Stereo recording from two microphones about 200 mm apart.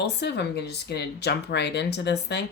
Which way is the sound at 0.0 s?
55° left (ahead or behind).